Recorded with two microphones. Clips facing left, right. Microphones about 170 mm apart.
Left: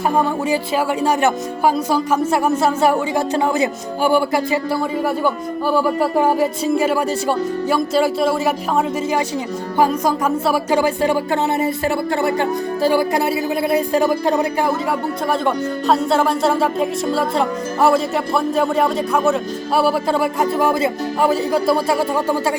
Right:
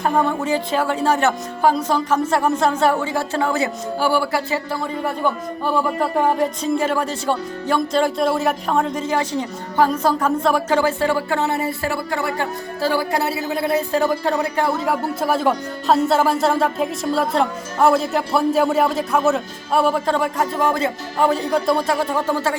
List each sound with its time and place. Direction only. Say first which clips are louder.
0.4 s speech: left 1 dB; 10° left (ahead or behind)
5.2 s speech: left 2 dB; 5° left (ahead or behind)
14.8 s speech: even; 5° right (ahead or behind)